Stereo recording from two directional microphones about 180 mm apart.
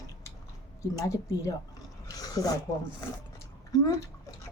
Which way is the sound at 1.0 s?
15° left (ahead or behind).